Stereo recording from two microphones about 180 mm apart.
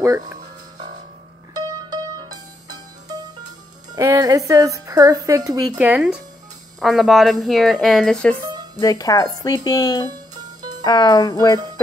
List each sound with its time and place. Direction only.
1.5 s music: 20° right (ahead or behind)
3.9 s a woman's voice: 20° right (ahead or behind)
5.8 s speech: 10° right (ahead or behind)
8.7 s speech: 20° left (ahead or behind)